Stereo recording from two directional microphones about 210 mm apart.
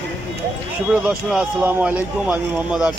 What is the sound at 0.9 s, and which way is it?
Speech, 5° right (ahead or behind).